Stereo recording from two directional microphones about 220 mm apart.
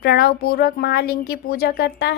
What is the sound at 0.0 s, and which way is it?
A woman's voice, 45° left (ahead or behind).